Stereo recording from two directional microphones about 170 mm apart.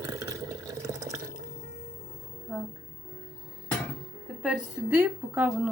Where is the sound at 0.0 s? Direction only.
20° right (ahead or behind).